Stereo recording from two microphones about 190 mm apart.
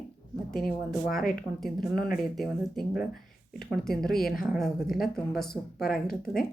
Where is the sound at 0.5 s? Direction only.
Centre (ahead or behind).